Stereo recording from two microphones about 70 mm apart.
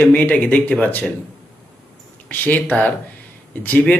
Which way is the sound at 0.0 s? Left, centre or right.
Left.